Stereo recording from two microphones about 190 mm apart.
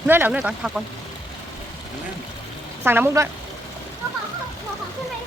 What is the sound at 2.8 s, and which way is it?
Speech, 10° right (ahead or behind).